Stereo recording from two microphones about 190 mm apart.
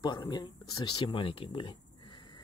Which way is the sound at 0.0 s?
20° left (ahead or behind).